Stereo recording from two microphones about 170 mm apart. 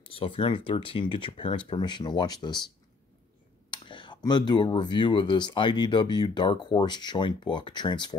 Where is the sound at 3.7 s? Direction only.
30° left (ahead or behind).